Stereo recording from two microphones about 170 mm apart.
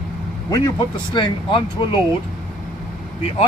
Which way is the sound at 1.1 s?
30° left (ahead or behind).